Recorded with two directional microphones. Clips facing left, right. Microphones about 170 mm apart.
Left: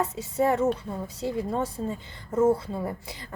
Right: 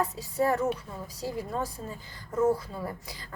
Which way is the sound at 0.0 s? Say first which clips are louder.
Left 2 dB; 20° left (ahead or behind).